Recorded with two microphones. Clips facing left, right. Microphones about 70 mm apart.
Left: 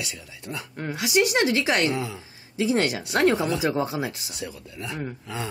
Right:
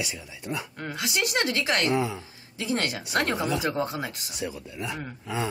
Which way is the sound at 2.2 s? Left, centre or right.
Centre.